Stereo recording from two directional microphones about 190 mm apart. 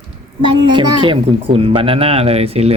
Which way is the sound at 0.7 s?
25° right (ahead or behind).